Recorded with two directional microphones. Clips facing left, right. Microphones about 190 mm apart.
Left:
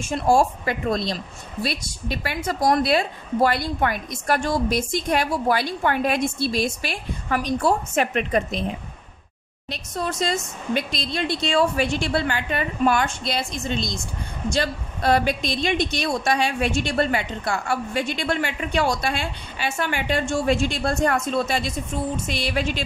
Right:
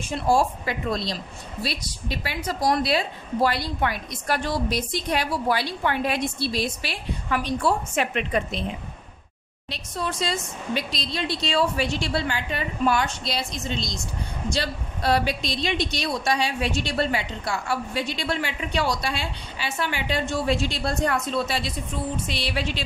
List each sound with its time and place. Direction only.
0.0 s a woman's voice: 45° left (ahead or behind)
9.7 s a woman's voice: 45° left (ahead or behind)